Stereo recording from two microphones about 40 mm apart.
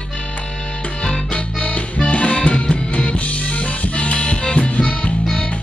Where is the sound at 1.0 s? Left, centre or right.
Left.